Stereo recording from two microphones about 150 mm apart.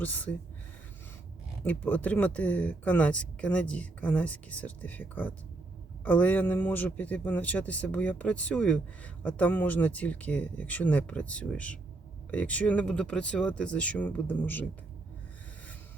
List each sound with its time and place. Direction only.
0.0 s speech: 10° left (ahead or behind)
1.6 s speech: 10° left (ahead or behind)